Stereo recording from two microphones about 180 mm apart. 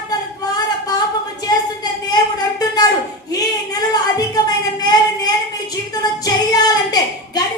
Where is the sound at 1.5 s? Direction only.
20° left (ahead or behind).